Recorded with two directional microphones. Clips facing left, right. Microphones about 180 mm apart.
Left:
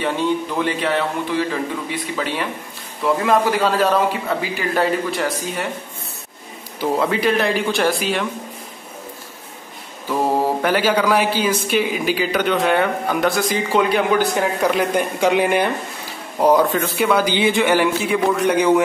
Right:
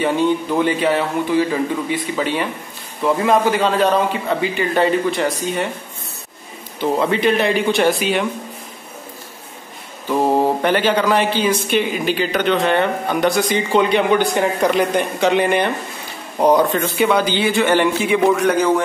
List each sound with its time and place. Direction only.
0.0 s speech: 5° right (ahead or behind)
6.8 s speech: 5° left (ahead or behind)
10.0 s mantra: 20° right (ahead or behind)
10.6 s a man's voice: 5° left (ahead or behind)
17.3 s a man's voice: 15° left (ahead or behind); by 18.6 s centre (ahead or behind)